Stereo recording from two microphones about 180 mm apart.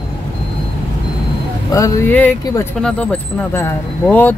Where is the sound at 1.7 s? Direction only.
15° left (ahead or behind).